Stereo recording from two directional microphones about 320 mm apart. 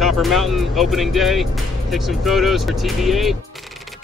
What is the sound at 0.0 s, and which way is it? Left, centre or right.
Speech, centre.